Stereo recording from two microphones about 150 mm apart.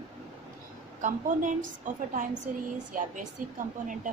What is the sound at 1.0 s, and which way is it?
A woman's voice, 60° right (ahead or behind).